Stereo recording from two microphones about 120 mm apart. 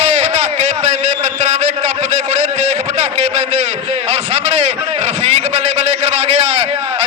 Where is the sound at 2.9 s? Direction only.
70° right (ahead or behind).